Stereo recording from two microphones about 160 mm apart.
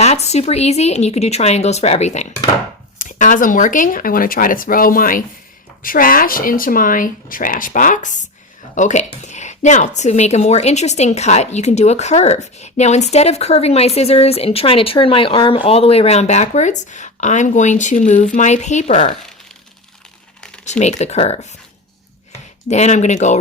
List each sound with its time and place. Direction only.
0.0 s a woman's voice: 40° left (ahead or behind)
3.0 s a woman's voice: 55° left (ahead or behind)
20.7 s a woman's voice: 45° left (ahead or behind)
22.7 s a woman's voice: 45° left (ahead or behind)